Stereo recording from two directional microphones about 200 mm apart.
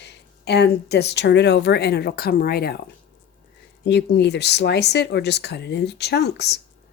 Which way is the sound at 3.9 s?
60° left (ahead or behind).